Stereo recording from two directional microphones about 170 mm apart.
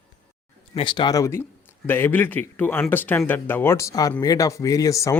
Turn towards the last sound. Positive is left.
turn(degrees=20)  # may be behind; listen again after turning